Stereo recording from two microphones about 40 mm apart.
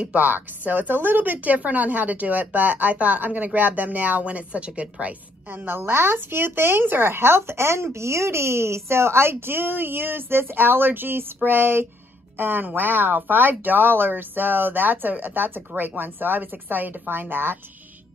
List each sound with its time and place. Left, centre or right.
0.0 s a woman's voice: right
5.5 s a woman's voice: right